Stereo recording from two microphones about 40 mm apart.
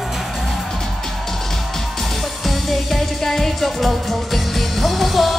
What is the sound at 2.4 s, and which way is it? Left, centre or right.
Music, centre.